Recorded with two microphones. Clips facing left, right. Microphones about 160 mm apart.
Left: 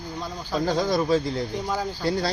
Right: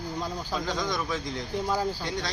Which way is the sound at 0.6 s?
40° left (ahead or behind).